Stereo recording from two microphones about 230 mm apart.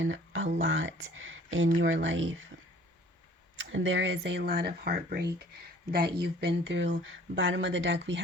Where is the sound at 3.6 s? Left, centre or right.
Right.